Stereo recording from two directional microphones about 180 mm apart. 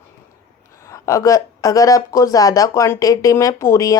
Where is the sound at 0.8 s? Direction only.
15° left (ahead or behind).